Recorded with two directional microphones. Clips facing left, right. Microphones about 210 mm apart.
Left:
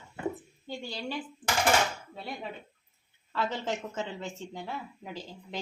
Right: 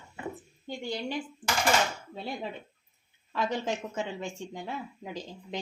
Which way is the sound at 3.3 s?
15° right (ahead or behind).